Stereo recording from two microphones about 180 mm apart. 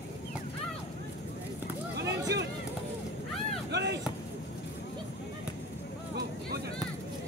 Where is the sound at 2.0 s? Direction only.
70° right (ahead or behind).